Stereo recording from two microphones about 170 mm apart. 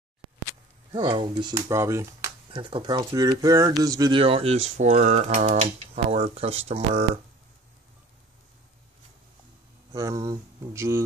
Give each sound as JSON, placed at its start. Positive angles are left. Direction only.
{"t": 0.9, "sound": "speech", "side_deg": -25}
{"t": 2.5, "sound": "speech", "side_deg": -30}
{"t": 4.2, "sound": "speech", "side_deg": -35}
{"t": 9.9, "sound": "mantra", "side_deg": -20}